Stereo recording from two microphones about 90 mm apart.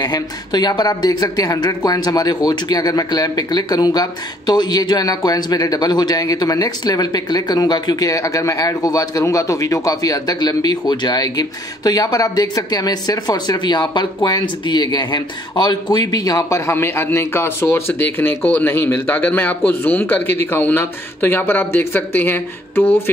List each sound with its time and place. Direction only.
0.0 s speech: 50° left (ahead or behind)
16.7 s a man's voice: 25° left (ahead or behind)